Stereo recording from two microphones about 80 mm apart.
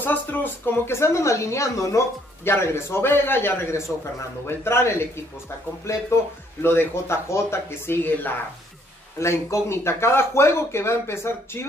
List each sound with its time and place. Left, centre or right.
0.0 s speech: left
9.2 s speech: left